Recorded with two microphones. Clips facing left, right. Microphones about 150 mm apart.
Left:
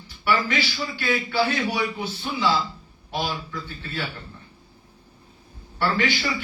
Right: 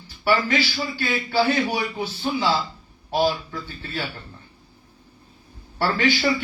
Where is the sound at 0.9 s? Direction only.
35° right (ahead or behind).